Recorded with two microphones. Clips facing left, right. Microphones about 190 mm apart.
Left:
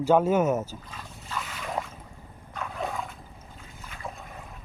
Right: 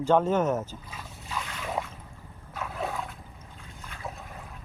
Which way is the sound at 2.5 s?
5° right (ahead or behind).